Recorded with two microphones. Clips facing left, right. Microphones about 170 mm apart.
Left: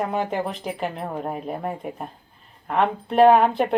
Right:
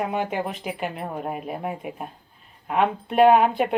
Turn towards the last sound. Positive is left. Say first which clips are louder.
# left 1 dB
turn(degrees=-5)  # may be behind; listen again after turning